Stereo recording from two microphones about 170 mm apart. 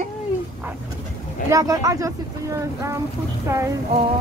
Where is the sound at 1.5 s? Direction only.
20° right (ahead or behind).